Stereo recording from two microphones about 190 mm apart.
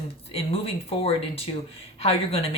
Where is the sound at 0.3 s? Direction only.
30° left (ahead or behind).